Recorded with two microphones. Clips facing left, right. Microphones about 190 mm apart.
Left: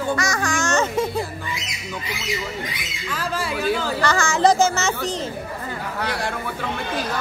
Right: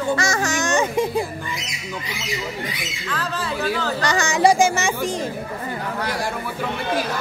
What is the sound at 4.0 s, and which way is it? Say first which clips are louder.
Speech: right 1 dB; 15° right (ahead or behind).